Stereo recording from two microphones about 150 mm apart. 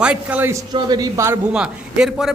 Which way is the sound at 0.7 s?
30° right (ahead or behind).